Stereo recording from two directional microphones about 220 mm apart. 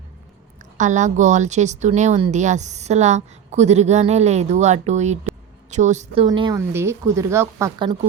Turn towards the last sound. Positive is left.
turn(degrees=-15)  # may be behind; listen again after turning